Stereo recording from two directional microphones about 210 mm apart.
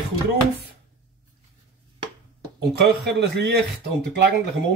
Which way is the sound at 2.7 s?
50° right (ahead or behind).